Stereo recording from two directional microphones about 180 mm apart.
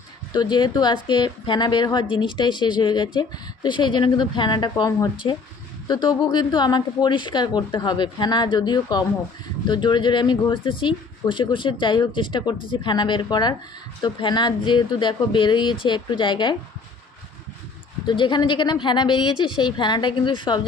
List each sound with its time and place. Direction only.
0.3 s speech: 25° left (ahead or behind)
18.0 s speech: 25° left (ahead or behind)